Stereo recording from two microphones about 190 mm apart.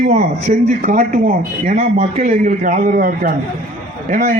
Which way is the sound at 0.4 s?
50° right (ahead or behind).